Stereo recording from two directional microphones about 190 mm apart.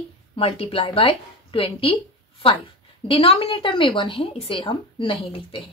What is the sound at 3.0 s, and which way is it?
A woman's voice, 30° left (ahead or behind).